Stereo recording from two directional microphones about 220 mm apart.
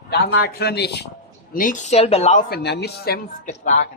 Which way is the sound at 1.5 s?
40° left (ahead or behind).